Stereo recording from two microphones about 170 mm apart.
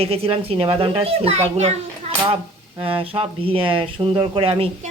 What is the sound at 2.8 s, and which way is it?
A woman's voice, 35° right (ahead or behind).